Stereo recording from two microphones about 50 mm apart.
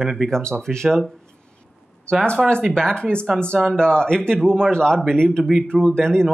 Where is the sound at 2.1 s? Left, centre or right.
Centre.